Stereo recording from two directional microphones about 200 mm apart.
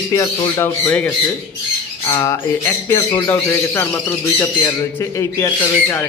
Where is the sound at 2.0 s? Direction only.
20° left (ahead or behind).